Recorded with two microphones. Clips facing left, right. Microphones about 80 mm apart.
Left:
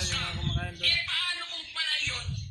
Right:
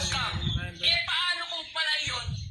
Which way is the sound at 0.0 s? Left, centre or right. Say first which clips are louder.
Right 3 dB; right.